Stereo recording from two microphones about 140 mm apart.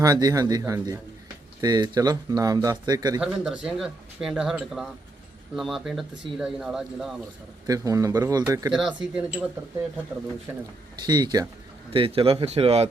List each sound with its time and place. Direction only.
0.0 s speech: 25° right (ahead or behind)
3.2 s speech: 5° right (ahead or behind)
7.7 s speech: 25° right (ahead or behind)
8.7 s speech: 5° right (ahead or behind)
10.5 s speech: 15° right (ahead or behind)
11.0 s speech: 30° right (ahead or behind)
11.9 s a man's voice: 40° right (ahead or behind)